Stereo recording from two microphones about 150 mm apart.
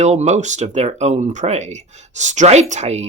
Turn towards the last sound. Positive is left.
turn(degrees=-45)  # may be behind; listen again after turning